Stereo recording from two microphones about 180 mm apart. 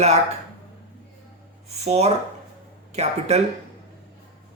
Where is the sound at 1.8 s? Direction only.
35° right (ahead or behind).